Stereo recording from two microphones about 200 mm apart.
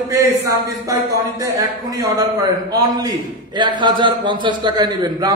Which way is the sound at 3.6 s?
20° right (ahead or behind).